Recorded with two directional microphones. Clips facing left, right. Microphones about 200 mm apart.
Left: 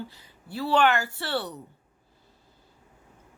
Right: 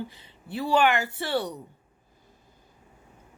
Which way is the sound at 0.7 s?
10° right (ahead or behind).